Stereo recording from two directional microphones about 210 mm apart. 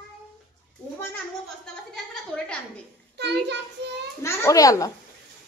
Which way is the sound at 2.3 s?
5° left (ahead or behind).